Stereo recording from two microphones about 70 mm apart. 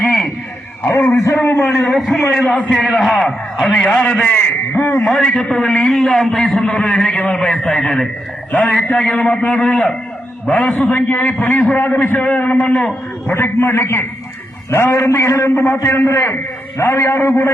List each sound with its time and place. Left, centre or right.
0.9 s a man's voice: left
2.0 s a man's voice: centre
2.4 s a man's voice: left
2.7 s a man's voice: centre
3.1 s a man's voice: centre
4.4 s a sound: left
5.0 s a man's voice: centre
8.5 s a man's voice: left
10.7 s a man's voice: left
13.2 s a man's voice: left